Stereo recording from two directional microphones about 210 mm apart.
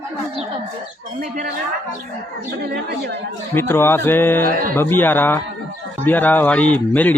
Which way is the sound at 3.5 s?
10° left (ahead or behind).